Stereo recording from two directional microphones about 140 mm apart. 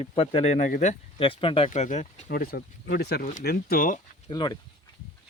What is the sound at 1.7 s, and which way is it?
Speech, 60° left (ahead or behind).